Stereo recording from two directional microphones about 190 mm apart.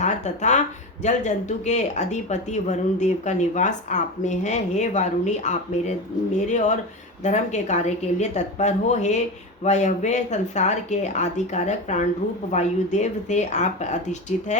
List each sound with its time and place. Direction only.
0.0 s speech: 40° left (ahead or behind)